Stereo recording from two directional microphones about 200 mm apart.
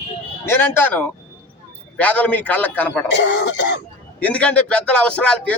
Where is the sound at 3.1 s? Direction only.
60° left (ahead or behind).